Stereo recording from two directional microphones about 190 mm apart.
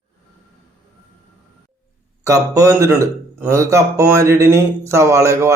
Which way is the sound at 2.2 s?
15° right (ahead or behind).